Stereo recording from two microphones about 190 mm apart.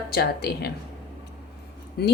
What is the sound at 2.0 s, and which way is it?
Speech, 60° left (ahead or behind).